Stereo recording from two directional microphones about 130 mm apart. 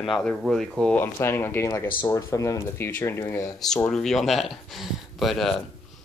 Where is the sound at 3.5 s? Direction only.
5° left (ahead or behind).